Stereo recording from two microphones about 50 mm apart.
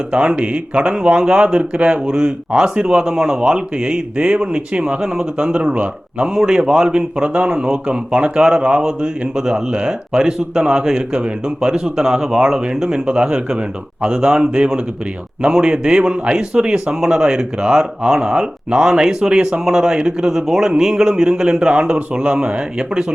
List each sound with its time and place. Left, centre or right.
0.1 s speech: right
5.4 s a man's voice: right